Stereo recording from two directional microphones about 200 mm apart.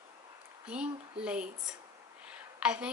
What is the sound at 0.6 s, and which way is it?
A woman's voice, 5° right (ahead or behind).